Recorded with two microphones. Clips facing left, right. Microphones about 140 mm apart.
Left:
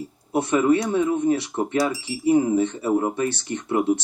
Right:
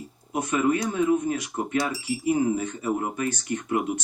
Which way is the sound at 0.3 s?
30° left (ahead or behind).